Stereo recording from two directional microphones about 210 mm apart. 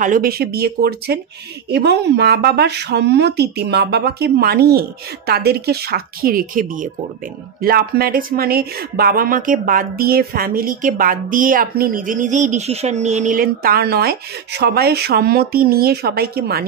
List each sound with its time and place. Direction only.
0.0 s speech: 40° right (ahead or behind)